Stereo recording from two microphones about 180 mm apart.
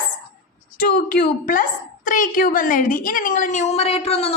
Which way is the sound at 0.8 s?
55° left (ahead or behind).